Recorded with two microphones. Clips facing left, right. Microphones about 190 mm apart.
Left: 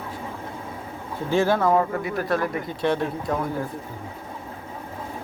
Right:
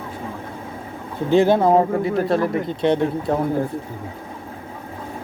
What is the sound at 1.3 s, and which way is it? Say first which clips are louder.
Speech: right 5 dB; 20° right (ahead or behind).